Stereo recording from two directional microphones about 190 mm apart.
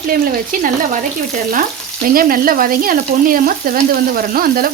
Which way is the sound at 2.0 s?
50° right (ahead or behind).